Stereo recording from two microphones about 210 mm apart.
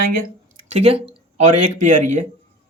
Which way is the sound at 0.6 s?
30° right (ahead or behind).